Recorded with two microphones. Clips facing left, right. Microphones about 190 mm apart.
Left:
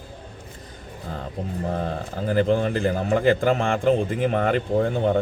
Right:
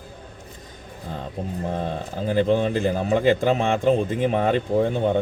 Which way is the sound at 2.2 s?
20° right (ahead or behind).